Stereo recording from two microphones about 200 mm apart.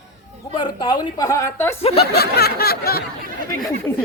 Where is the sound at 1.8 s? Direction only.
30° left (ahead or behind).